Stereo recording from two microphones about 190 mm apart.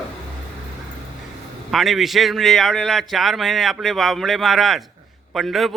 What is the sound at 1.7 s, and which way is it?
A man's voice, centre (ahead or behind).